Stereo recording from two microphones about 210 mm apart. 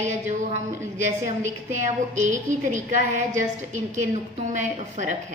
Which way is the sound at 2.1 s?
35° right (ahead or behind).